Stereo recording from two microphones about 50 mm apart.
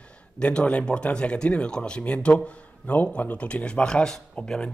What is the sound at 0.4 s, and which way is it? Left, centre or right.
A man's voice, left.